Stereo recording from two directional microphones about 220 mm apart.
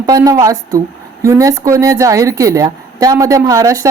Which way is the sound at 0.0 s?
15° right (ahead or behind).